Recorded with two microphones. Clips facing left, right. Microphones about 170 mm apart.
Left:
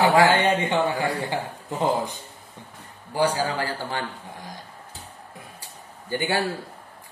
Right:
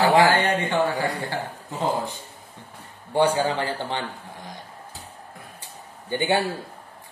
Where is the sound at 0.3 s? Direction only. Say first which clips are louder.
Left 1 dB; 20° left (ahead or behind).